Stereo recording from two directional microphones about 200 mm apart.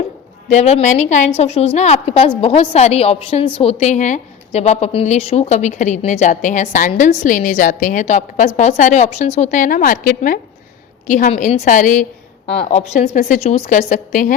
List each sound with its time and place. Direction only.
0.4 s a woman's voice: 35° left (ahead or behind)